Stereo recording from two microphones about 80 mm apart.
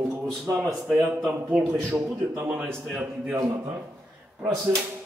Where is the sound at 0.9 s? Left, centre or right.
Centre.